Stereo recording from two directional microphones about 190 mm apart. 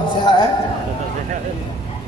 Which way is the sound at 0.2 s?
25° left (ahead or behind).